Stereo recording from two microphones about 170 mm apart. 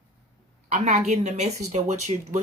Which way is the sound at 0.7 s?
40° right (ahead or behind).